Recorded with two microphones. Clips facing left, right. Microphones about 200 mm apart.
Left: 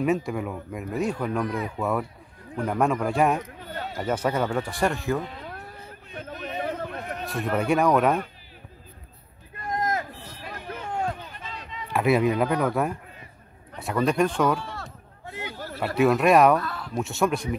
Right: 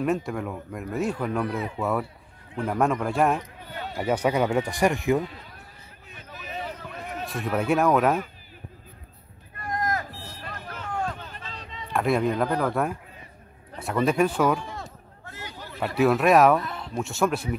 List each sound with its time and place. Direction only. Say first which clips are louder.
0.0 s speech: left 1 dB; centre (ahead or behind)
3.9 s speech: right 2 dB; 10° right (ahead or behind)
6.1 s a sound: left 5 dB; 55° left (ahead or behind)
7.2 s speech: even; centre (ahead or behind)
9.7 s vehicle: left 1 dB; 20° left (ahead or behind)
10.9 s a sound: left 1 dB; 25° left (ahead or behind)
11.9 s speech: left 2 dB; 5° left (ahead or behind)
14.6 s a sound: even; 20° right (ahead or behind)
15.2 s a sound: left 5 dB; 15° left (ahead or behind)
15.8 s speech: left 1 dB; centre (ahead or behind)
16.5 s speech: even; 20° right (ahead or behind)
16.9 s speech: even; centre (ahead or behind)